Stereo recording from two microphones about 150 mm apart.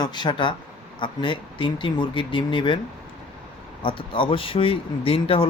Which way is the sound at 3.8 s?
35° left (ahead or behind).